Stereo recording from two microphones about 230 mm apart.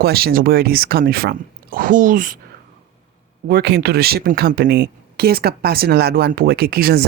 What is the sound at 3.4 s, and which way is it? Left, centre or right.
Speech, right.